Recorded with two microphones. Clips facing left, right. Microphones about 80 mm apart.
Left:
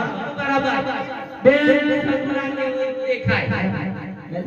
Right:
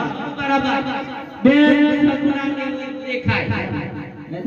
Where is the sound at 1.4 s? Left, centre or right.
Left.